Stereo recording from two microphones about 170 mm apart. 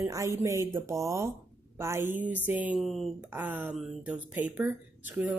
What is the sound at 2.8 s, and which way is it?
Speech, centre (ahead or behind).